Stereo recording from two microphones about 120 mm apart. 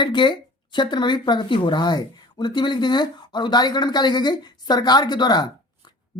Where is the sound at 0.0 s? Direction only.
40° left (ahead or behind).